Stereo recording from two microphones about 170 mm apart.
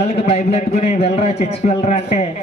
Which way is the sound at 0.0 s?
40° left (ahead or behind).